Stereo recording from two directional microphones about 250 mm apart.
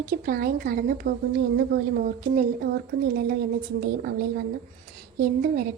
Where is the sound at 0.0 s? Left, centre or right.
Right.